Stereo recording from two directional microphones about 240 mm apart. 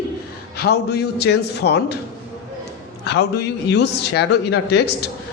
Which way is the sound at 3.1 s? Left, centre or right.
Left.